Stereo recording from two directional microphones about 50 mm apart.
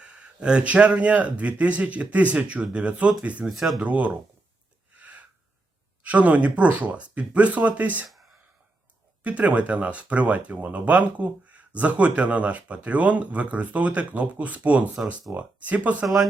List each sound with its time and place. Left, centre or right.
0.0 s speech: right
3.5 s speech: centre
3.8 s speech: right
4.9 s gasp: right
6.0 s speech: right
9.2 s speech: right